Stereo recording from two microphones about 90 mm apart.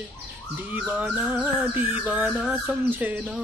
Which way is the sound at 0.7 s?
15° right (ahead or behind).